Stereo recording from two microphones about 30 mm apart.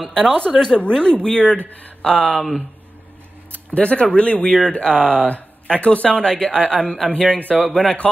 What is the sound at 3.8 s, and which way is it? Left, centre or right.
Speech, left.